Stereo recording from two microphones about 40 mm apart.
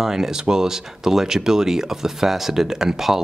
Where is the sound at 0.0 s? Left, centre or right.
Centre.